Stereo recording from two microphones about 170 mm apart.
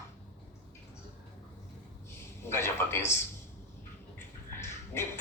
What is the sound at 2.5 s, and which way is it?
Speech, 15° left (ahead or behind).